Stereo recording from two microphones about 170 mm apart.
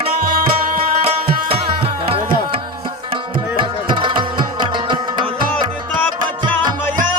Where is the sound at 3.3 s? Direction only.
30° right (ahead or behind).